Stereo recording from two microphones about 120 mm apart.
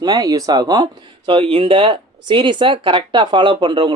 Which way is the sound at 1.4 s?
60° right (ahead or behind).